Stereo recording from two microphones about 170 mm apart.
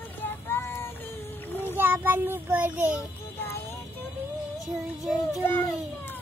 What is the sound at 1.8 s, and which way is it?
Child singing, 10° right (ahead or behind).